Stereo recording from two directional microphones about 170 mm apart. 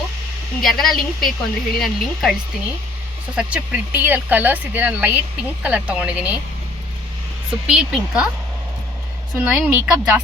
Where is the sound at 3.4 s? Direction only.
5° right (ahead or behind).